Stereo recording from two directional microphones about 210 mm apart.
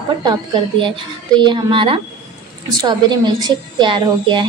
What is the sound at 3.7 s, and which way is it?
Speech, 20° right (ahead or behind).